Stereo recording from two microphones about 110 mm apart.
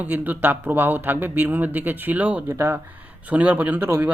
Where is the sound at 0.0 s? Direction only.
15° right (ahead or behind).